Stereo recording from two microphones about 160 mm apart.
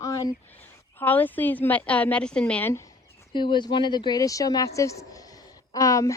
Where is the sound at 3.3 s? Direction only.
30° left (ahead or behind).